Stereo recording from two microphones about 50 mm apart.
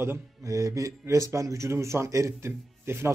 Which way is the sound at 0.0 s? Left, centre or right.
Right.